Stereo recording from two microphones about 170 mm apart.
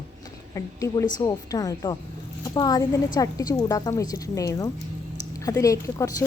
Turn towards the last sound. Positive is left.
turn(degrees=20)  # may be behind; listen again after turning